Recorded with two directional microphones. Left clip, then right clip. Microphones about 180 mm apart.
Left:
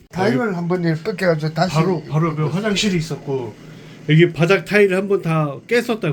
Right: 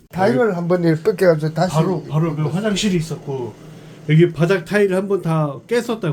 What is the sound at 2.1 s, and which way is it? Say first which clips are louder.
A man's voice: left 1 dB; 5° left (ahead or behind).